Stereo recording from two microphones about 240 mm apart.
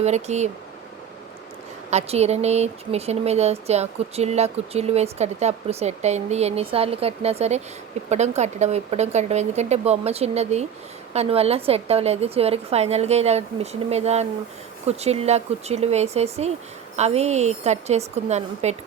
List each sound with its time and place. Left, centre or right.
0.0 s speech: right
1.9 s speech: right